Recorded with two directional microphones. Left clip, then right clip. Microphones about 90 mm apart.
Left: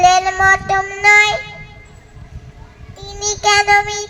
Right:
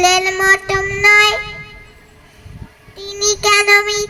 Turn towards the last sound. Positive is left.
turn(degrees=-65)  # may be behind; listen again after turning